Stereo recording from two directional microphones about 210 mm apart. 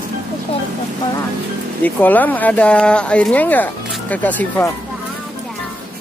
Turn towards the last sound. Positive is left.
turn(degrees=10)  # may be behind; listen again after turning